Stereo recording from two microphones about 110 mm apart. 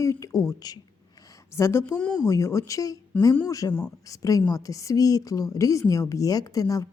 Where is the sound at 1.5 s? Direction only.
25° left (ahead or behind).